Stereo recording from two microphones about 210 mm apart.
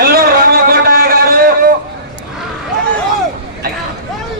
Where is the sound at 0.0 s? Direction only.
45° right (ahead or behind).